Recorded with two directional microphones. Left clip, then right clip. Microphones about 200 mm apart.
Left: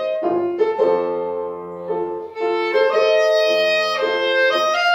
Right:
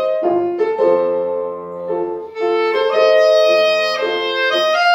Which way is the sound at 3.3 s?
Centre (ahead or behind).